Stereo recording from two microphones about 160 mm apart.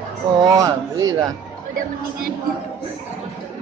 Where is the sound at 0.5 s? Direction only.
20° right (ahead or behind).